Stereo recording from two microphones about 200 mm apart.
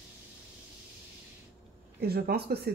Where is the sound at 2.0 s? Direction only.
50° right (ahead or behind).